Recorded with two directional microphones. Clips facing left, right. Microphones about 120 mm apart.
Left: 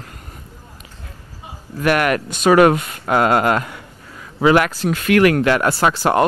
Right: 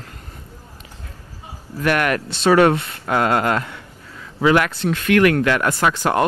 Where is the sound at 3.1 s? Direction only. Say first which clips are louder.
Left 3 dB; 30° left (ahead or behind).